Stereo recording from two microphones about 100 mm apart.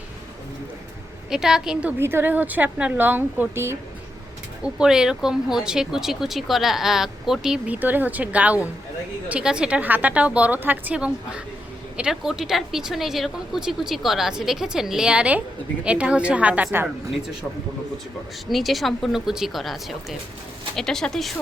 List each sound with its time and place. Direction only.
1.3 s speech: 5° right (ahead or behind)
2.0 s a woman's voice: 25° right (ahead or behind)
4.6 s speech: 5° right (ahead or behind)
7.8 s a woman's voice: 15° right (ahead or behind)
18.4 s speech: centre (ahead or behind)